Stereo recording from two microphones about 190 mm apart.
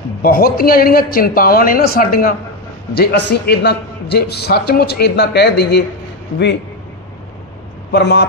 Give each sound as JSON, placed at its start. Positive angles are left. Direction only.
{"t": 0.2, "sound": "a man's voice", "side_deg": 50}
{"t": 7.9, "sound": "a man's voice", "side_deg": 60}